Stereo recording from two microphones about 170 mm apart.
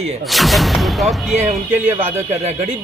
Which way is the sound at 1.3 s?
40° right (ahead or behind).